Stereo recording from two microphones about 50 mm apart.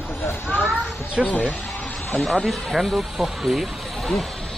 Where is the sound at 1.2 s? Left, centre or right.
Centre.